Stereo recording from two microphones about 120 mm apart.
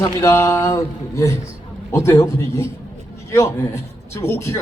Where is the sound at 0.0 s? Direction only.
25° left (ahead or behind).